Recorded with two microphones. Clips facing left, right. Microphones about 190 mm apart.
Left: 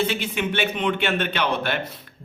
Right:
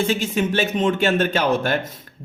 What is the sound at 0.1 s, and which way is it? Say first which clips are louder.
A man's voice: right 5 dB; 40° right (ahead or behind).